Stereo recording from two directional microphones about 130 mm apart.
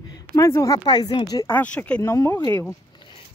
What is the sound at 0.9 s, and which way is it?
Speech, 35° left (ahead or behind).